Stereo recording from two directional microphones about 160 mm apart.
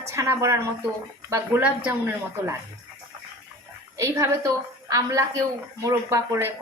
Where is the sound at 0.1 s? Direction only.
15° right (ahead or behind).